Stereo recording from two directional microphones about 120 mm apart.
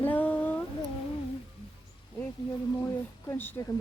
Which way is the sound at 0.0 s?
15° left (ahead or behind).